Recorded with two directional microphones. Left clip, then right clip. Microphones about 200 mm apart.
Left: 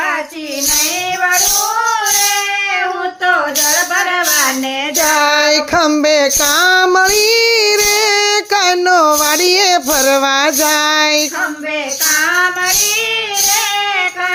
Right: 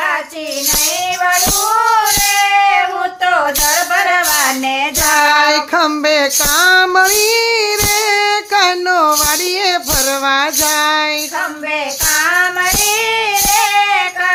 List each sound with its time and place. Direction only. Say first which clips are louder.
5.1 s female singing: right 2 dB; 30° left (ahead or behind)
13.6 s child singing: right 3 dB; 30° right (ahead or behind)